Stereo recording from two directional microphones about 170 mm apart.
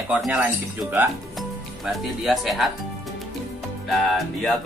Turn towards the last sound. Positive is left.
turn(degrees=5)  # may be behind; listen again after turning